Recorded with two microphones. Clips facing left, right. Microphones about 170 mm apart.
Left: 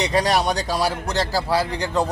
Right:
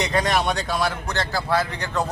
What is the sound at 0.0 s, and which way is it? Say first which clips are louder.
A man's voice: left 2 dB; 35° left (ahead or behind).